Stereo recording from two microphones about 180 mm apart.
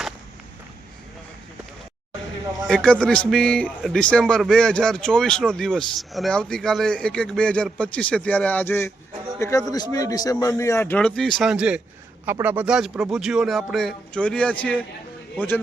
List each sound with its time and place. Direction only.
2.6 s a man's voice: 5° left (ahead or behind)